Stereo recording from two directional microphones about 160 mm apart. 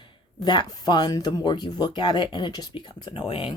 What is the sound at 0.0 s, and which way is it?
A woman's voice, 25° left (ahead or behind).